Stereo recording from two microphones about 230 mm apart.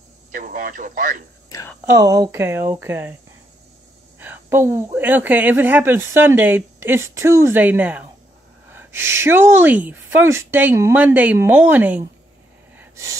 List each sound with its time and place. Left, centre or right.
0.3 s speech: right
1.5 s speech: centre
1.9 s speech: centre
4.2 s speech: centre
12.7 s gasp: centre